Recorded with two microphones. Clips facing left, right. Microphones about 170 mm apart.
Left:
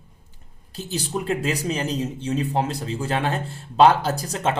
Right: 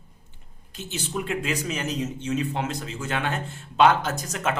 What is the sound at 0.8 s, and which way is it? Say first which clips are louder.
Speech: left 3 dB; 35° left (ahead or behind).